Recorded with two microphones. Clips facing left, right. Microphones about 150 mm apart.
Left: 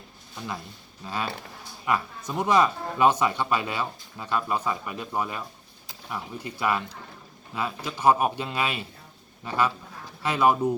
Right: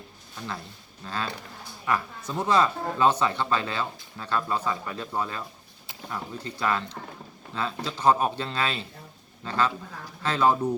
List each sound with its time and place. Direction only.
1.0 s speech: 15° left (ahead or behind)